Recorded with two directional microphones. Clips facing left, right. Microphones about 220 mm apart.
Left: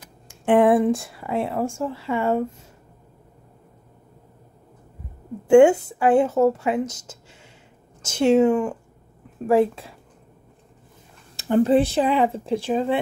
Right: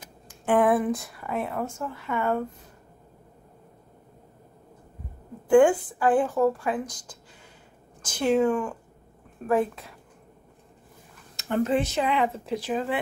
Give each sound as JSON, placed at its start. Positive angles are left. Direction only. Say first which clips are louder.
{"t": 0.3, "sound": "speech", "louder": "left 5 dB", "side_deg": 25}
{"t": 5.5, "sound": "speech", "louder": "left 5 dB", "side_deg": 25}
{"t": 11.3, "sound": "speech", "louder": "left 7 dB", "side_deg": 30}